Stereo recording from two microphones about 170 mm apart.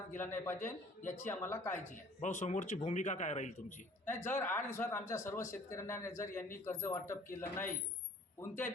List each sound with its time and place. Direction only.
0.1 s speech: 10° left (ahead or behind)
1.7 s speech: 45° left (ahead or behind)
4.0 s speech: 15° left (ahead or behind)